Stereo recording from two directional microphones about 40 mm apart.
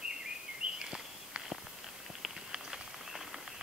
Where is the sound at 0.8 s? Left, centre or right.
Right.